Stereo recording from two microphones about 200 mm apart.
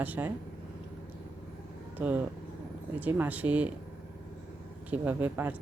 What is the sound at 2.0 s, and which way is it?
Speech, 10° right (ahead or behind).